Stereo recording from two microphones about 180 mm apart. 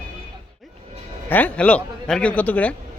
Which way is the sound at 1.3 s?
10° left (ahead or behind).